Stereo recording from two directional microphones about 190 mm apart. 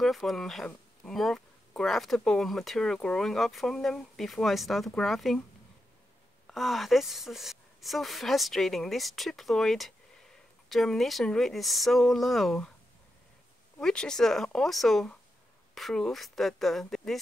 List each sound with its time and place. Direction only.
0.0 s speech: centre (ahead or behind)
6.4 s speech: centre (ahead or behind)
13.7 s speech: 5° left (ahead or behind)